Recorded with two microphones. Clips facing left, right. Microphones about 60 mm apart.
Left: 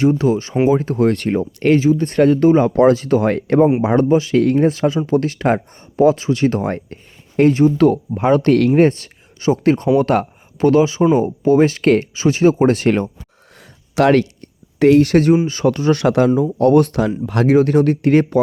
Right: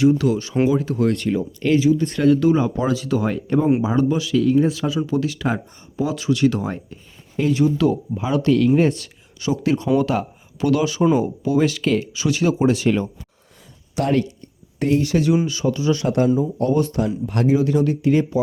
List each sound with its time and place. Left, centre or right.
0.0 s speech: left
2.6 s speech: left
4.1 s speech: left
4.4 s speech: left
6.1 s speech: left
6.7 s a sound: left
7.5 s speech: left
10.7 s speech: left
12.1 s speech: left
13.9 s speech: left
14.8 s speech: left
15.0 s speech: left
16.0 s speech: left
17.6 s speech: left